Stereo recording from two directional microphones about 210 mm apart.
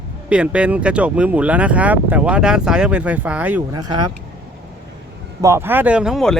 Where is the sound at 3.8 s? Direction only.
20° right (ahead or behind).